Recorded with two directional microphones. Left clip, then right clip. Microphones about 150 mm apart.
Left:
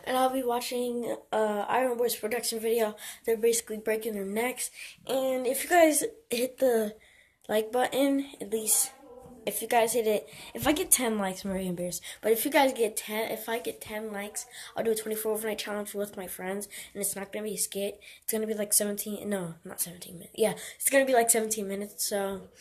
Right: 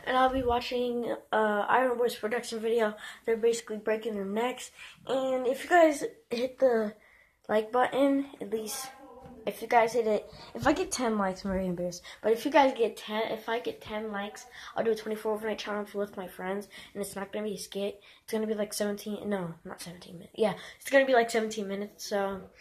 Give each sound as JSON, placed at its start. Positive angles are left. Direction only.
{"t": 0.0, "sound": "speech", "side_deg": 25}
{"t": 7.4, "sound": "speech", "side_deg": 25}